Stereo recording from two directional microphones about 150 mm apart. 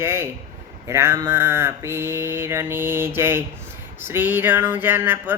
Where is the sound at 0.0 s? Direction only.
15° right (ahead or behind).